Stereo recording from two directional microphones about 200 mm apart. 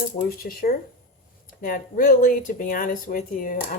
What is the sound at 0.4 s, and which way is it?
Speech, 45° left (ahead or behind).